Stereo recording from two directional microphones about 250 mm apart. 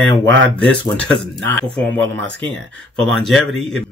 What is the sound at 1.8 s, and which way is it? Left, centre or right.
Speech, centre.